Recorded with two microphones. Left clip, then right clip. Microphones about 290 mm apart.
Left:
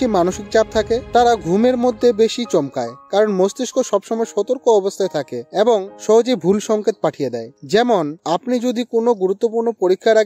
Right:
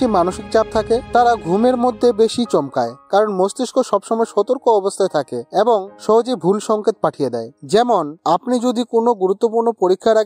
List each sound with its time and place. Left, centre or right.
0.0 s speech: centre